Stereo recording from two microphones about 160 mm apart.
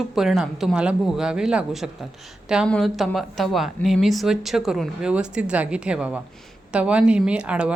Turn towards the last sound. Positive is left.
turn(degrees=-5)  # may be behind; listen again after turning